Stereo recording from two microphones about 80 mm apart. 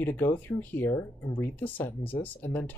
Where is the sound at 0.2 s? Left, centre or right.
Left.